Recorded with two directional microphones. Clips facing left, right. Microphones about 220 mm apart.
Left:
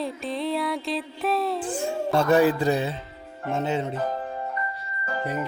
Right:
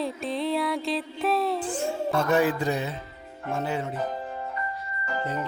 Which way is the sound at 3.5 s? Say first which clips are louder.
Left 3 dB; 20° left (ahead or behind).